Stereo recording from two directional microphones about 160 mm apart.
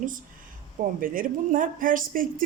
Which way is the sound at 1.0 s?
60° right (ahead or behind).